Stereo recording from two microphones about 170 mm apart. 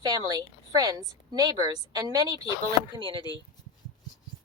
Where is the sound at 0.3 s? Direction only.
20° right (ahead or behind).